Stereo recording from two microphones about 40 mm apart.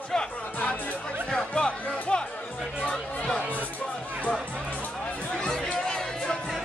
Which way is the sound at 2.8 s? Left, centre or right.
Centre.